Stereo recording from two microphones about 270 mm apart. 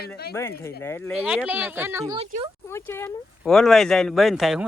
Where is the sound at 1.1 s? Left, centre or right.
Centre.